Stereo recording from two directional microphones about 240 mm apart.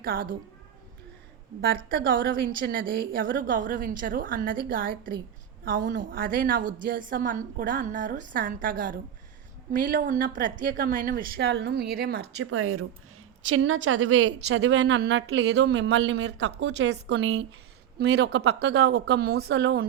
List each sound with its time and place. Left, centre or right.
0.0 s speech: right
1.6 s speech: right